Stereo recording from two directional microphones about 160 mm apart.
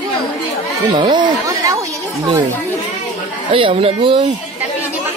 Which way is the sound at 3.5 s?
35° right (ahead or behind).